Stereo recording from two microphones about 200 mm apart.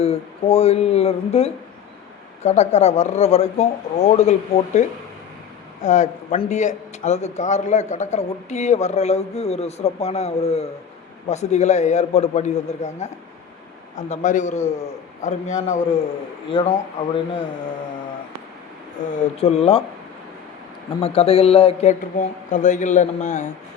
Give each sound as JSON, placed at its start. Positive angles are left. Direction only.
{"t": 0.0, "sound": "a man's voice", "side_deg": 30}
{"t": 19.1, "sound": "speech", "side_deg": 30}
{"t": 21.0, "sound": "speech", "side_deg": 30}